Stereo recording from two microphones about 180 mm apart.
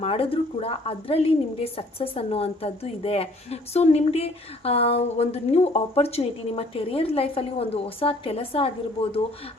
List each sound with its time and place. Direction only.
0.0 s a woman's voice: 30° left (ahead or behind)